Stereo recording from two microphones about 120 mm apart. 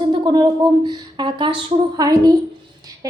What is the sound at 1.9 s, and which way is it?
Speech, 30° right (ahead or behind).